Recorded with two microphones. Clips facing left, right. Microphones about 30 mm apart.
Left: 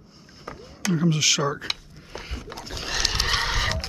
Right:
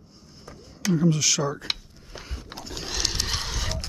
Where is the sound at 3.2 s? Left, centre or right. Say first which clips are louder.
Left 6 dB; left.